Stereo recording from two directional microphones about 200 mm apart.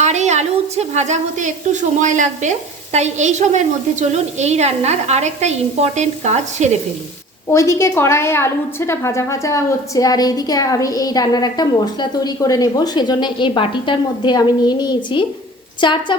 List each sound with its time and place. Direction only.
0.0 s a woman's voice: 35° right (ahead or behind)
7.4 s a woman's voice: 15° left (ahead or behind)